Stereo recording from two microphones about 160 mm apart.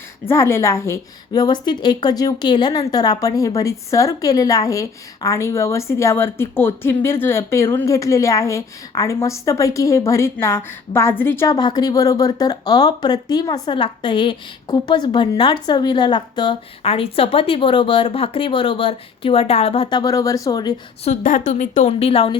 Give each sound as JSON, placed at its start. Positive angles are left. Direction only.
{"t": 0.3, "sound": "a woman's voice", "side_deg": 15}
{"t": 21.0, "sound": "a woman's voice", "side_deg": 50}